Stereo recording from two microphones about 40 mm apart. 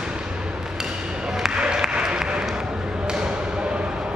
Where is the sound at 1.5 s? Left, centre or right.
Centre.